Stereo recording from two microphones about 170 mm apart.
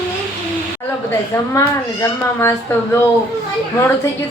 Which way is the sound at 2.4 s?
15° left (ahead or behind).